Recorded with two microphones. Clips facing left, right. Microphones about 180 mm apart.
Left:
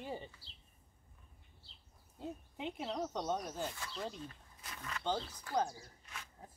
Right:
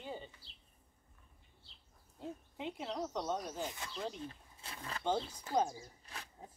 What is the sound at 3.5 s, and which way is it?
Speech, 15° right (ahead or behind).